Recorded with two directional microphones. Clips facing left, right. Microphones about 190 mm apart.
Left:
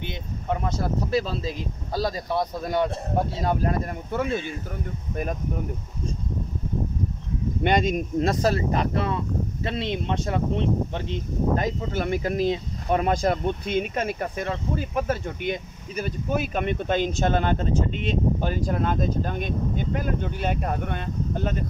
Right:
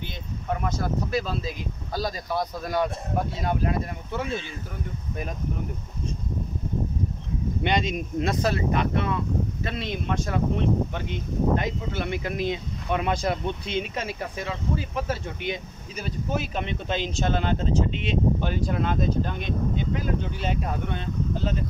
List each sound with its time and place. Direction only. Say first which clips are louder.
0.5 s speech: left 1 dB; 30° left (ahead or behind); by 4.3 s 45° left (ahead or behind)
7.6 s speech: left 5 dB; 50° left (ahead or behind)